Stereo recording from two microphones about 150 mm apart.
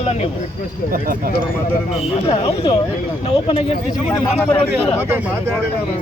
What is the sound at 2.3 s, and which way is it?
Speech, 40° left (ahead or behind).